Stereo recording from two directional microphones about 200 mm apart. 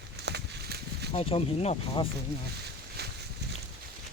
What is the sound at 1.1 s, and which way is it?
Speech, 30° left (ahead or behind).